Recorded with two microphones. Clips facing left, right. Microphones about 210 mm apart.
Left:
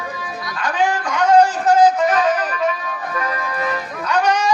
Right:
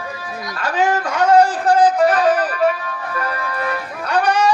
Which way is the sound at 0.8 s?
45° right (ahead or behind).